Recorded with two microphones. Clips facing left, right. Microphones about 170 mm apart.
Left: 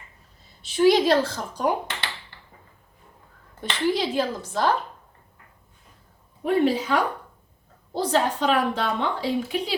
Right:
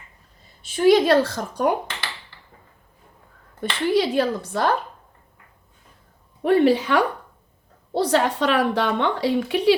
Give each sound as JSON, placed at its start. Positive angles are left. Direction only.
{"t": 0.6, "sound": "a woman's voice", "side_deg": -50}
{"t": 3.6, "sound": "a woman's voice", "side_deg": -60}
{"t": 6.4, "sound": "a woman's voice", "side_deg": -70}